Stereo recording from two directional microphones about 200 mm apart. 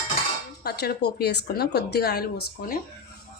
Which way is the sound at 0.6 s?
50° left (ahead or behind).